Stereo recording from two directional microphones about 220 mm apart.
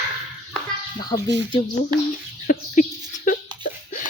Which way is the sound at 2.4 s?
35° left (ahead or behind).